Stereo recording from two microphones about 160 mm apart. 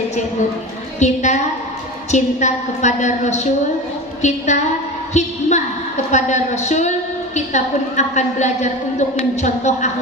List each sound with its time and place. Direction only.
0.9 s a woman's voice: 45° left (ahead or behind)